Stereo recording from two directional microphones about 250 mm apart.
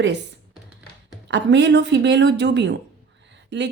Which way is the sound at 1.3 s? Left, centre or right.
Right.